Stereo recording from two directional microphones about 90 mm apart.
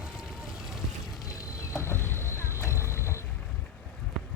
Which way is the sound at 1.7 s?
30° left (ahead or behind).